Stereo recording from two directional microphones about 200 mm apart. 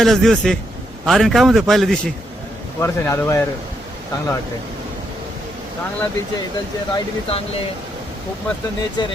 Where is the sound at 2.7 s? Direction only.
15° left (ahead or behind).